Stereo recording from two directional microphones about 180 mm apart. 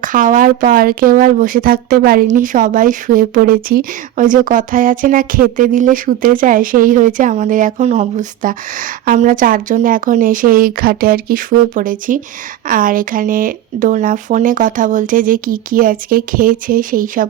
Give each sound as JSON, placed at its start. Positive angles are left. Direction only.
{"t": 0.0, "sound": "speech", "side_deg": -45}